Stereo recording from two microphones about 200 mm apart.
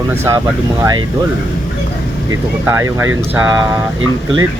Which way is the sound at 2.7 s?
15° right (ahead or behind).